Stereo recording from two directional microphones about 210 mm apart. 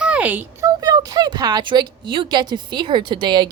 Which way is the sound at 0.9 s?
20° right (ahead or behind).